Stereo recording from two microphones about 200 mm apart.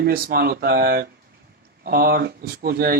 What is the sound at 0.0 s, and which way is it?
Speech, 50° right (ahead or behind).